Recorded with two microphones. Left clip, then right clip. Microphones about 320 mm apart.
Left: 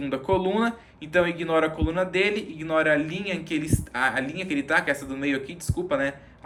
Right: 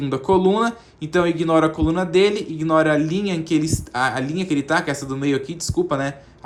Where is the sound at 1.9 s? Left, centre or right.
Centre.